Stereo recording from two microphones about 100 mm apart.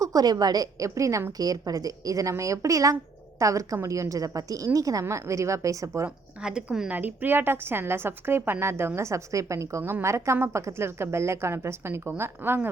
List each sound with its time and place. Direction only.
0.0 s a woman's voice: 40° right (ahead or behind)
6.4 s a woman's voice: 10° right (ahead or behind); by 12.5 s 25° right (ahead or behind)